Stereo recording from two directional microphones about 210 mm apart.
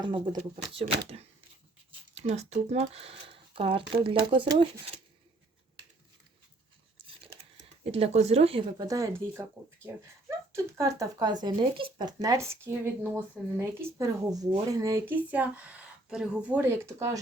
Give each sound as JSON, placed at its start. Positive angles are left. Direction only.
{"t": 0.0, "sound": "speech", "side_deg": -20}
{"t": 7.9, "sound": "speech", "side_deg": -30}